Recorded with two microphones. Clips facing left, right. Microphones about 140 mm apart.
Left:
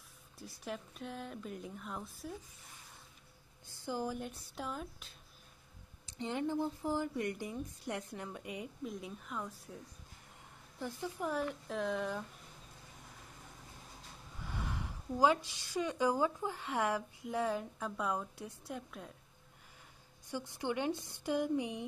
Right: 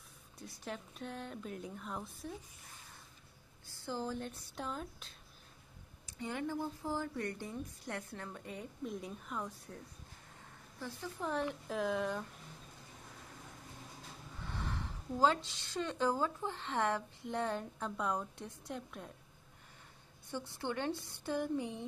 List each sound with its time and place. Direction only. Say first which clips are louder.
0.4 s a woman's voice: left 1 dB; centre (ahead or behind)
3.6 s a woman's voice: left 2 dB; 15° left (ahead or behind)
6.0 s speech: left 3 dB; 20° left (ahead or behind)
8.8 s a woman's voice: right 1 dB; centre (ahead or behind)
10.8 s speech: left 3 dB; 15° left (ahead or behind)
11.2 s a woman's voice: right 1 dB; centre (ahead or behind)
14.4 s speech: even; 10° left (ahead or behind)
20.2 s speech: left 2 dB; 15° left (ahead or behind)